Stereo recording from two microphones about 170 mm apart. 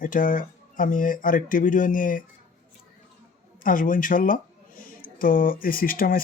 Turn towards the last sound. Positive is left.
turn(degrees=55)  # may be behind; listen again after turning